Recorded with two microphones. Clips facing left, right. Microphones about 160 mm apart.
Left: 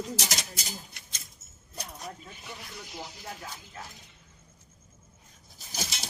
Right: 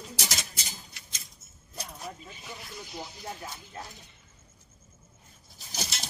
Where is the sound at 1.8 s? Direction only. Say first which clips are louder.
Even; 5° right (ahead or behind).